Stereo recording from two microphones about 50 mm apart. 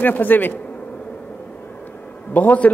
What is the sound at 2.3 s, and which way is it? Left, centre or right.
Speech, left.